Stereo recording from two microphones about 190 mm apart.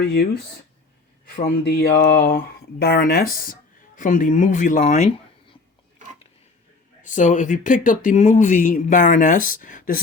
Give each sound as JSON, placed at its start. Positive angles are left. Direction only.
{"t": 0.0, "sound": "speech", "side_deg": 55}
{"t": 1.4, "sound": "speech", "side_deg": 55}
{"t": 7.0, "sound": "speech", "side_deg": 40}